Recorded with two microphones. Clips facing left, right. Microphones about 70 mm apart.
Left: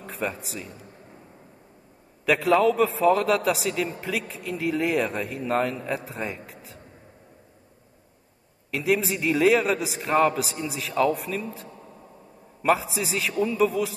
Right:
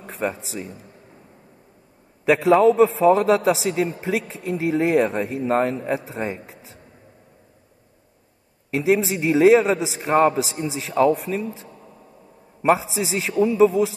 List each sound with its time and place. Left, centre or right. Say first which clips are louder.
0.0 s speech: right 4 dB; right
2.2 s a man's voice: right 5 dB; centre
8.6 s a man's voice: right 5 dB; right
12.7 s a man's voice: right 3 dB; right